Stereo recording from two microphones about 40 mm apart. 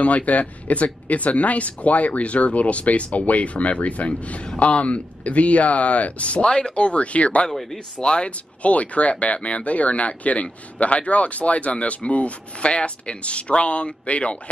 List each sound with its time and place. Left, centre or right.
0.0 s speech: left
8.0 s speech: left
8.6 s speech: left